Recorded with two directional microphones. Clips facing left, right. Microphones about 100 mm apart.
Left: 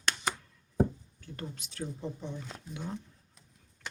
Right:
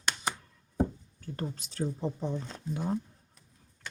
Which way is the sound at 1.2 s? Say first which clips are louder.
Right 5 dB; 35° right (ahead or behind).